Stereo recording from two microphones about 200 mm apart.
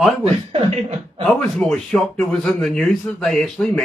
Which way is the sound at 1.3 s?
Centre (ahead or behind).